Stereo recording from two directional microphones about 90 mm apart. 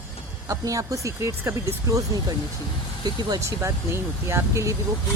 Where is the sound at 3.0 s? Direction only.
50° right (ahead or behind).